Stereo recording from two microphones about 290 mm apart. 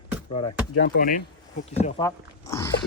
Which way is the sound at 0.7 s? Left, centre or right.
Left.